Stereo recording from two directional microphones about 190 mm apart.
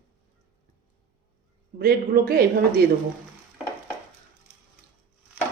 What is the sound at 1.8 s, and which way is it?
A woman's voice, 50° right (ahead or behind).